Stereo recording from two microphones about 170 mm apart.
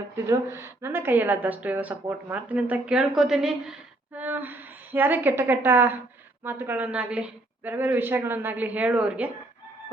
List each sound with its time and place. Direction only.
0.3 s a woman's voice: 15° right (ahead or behind)